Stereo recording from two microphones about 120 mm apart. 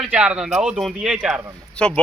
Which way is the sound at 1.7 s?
10° left (ahead or behind).